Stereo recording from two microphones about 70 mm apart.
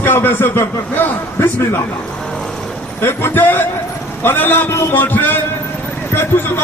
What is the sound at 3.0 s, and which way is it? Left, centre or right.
A man's voice, left.